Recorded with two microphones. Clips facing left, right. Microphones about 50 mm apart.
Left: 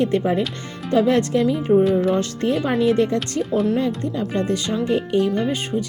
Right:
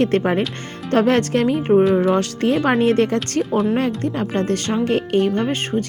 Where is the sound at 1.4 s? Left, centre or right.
Right.